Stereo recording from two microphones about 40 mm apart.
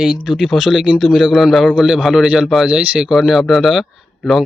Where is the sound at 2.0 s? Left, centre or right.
Centre.